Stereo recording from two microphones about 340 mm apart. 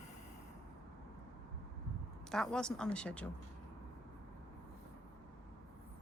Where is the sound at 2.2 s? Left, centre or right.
Centre.